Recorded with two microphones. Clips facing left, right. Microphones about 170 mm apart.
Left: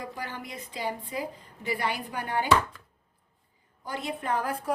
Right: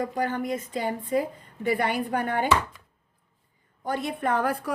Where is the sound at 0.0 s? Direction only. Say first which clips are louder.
Right 10 dB; 50° right (ahead or behind).